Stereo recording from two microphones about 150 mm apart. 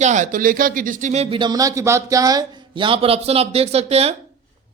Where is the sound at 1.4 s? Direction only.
25° right (ahead or behind); by 4.1 s 45° right (ahead or behind).